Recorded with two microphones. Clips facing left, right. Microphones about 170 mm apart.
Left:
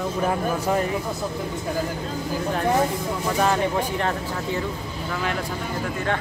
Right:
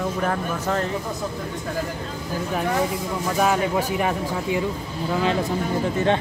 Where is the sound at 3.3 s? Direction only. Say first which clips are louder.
Right 1 dB; 5° right (ahead or behind).